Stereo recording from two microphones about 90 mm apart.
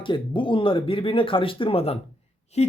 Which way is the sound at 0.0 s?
70° left (ahead or behind).